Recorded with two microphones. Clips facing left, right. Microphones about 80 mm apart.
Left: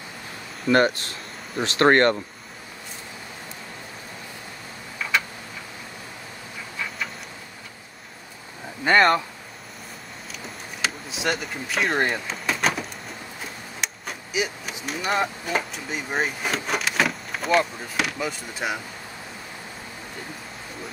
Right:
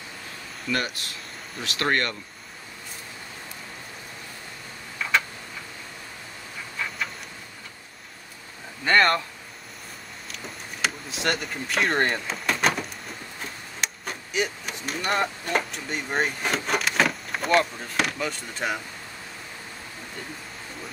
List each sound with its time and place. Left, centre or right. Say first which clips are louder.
0.7 s speech: left 10 dB; left
4.9 s tick-tock: even; centre
8.8 s speech: left 2 dB; centre
10.3 s a sound: even; centre
13.4 s speech: even; centre